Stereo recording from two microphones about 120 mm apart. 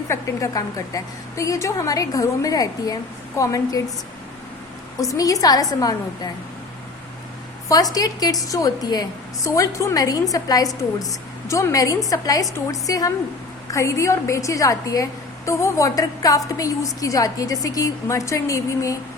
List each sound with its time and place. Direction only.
0.1 s a woman's voice: 25° left (ahead or behind)
4.9 s a woman's voice: 30° left (ahead or behind)
7.7 s a woman's voice: 30° left (ahead or behind)